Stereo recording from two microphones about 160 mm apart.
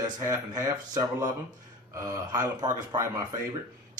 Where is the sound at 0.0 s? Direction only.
20° right (ahead or behind).